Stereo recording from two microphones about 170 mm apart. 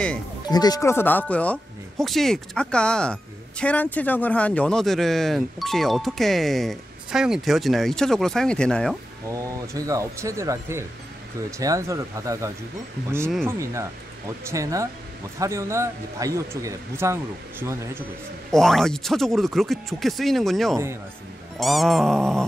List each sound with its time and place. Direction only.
0.5 s speech: 25° left (ahead or behind); by 8.9 s 5° left (ahead or behind)
9.3 s speech: 20° right (ahead or behind)
13.5 s speech: 15° right (ahead or behind)
18.5 s speech: centre (ahead or behind)
20.7 s speech: 15° right (ahead or behind)
21.5 s speech: centre (ahead or behind)